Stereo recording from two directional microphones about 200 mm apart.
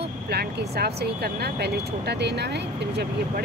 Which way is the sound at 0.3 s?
50° right (ahead or behind).